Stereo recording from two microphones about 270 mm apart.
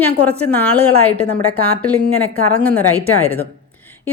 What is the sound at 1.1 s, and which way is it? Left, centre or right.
Speech, right.